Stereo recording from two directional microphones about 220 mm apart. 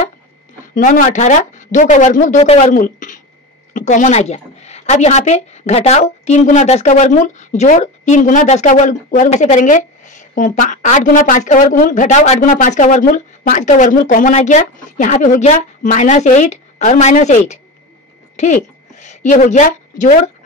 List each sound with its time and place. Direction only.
0.8 s a woman's voice: 35° left (ahead or behind)
18.3 s a sound: 30° left (ahead or behind)
18.9 s a woman's voice: 35° left (ahead or behind)